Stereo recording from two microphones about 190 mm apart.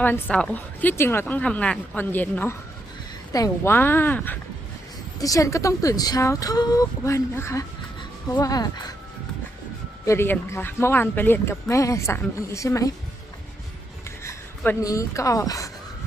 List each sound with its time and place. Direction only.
0.0 s speech: 10° left (ahead or behind)
10.1 s speech: 15° left (ahead or behind)
14.3 s speech: 10° left (ahead or behind)